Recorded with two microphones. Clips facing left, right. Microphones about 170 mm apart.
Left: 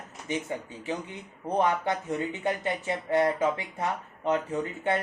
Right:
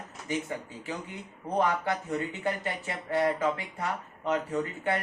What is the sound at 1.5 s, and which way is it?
Speech, 20° left (ahead or behind).